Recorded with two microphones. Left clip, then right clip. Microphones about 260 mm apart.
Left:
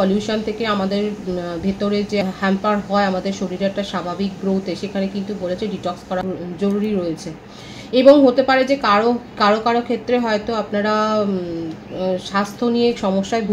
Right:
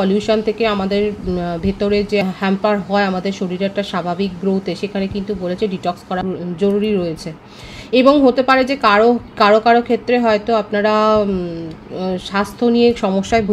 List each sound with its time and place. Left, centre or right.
0.0 s speech: right